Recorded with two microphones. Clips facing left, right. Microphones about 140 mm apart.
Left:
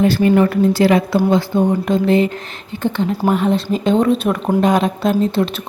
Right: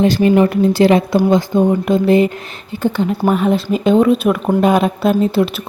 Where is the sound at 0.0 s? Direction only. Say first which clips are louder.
Right 1 dB; 20° right (ahead or behind).